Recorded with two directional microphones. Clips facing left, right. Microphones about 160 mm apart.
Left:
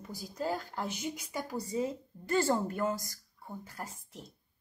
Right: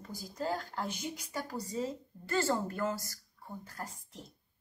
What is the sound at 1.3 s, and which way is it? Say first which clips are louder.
A woman's voice: left 3 dB; 15° left (ahead or behind).